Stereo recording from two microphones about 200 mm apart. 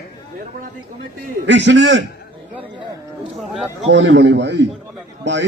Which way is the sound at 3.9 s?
60° right (ahead or behind).